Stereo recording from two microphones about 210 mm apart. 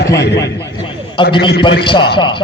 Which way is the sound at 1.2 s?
20° left (ahead or behind).